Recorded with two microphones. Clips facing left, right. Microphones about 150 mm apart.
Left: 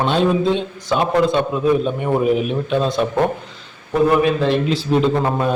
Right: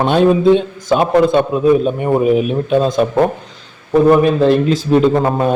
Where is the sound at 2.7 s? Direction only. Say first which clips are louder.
Right 6 dB; 45° right (ahead or behind).